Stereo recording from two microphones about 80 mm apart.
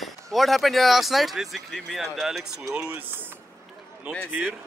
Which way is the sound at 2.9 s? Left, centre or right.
Right.